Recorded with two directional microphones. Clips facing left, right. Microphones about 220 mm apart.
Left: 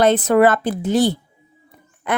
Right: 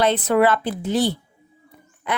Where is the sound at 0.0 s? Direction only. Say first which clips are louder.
Left 4 dB; 45° left (ahead or behind).